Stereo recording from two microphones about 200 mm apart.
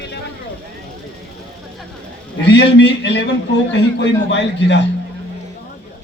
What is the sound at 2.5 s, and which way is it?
A man's voice, 60° left (ahead or behind).